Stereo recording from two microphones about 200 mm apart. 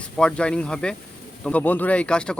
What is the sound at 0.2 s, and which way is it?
Speech, 5° left (ahead or behind).